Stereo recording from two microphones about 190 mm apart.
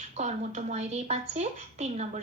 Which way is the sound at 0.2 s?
35° right (ahead or behind).